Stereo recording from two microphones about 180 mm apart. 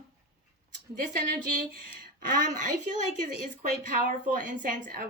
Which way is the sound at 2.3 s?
45° right (ahead or behind).